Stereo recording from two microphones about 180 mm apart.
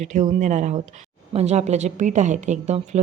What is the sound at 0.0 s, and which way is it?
Speech, 40° right (ahead or behind).